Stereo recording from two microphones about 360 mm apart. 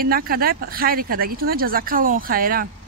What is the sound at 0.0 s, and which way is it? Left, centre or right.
Speech, right.